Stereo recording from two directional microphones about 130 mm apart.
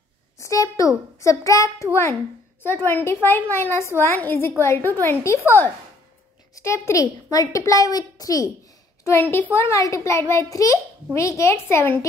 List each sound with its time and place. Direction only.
0.4 s a woman's voice: 25° left (ahead or behind)
9.0 s a woman's voice: 15° left (ahead or behind)